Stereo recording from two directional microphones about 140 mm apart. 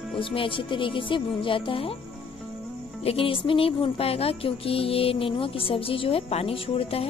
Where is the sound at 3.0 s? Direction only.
40° left (ahead or behind).